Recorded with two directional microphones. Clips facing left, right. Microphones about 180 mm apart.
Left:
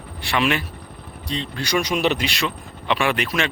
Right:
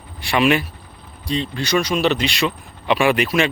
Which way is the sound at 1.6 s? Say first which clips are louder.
Right 2 dB; 15° left (ahead or behind).